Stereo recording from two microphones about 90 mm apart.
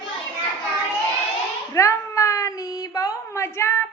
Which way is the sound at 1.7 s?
35° left (ahead or behind).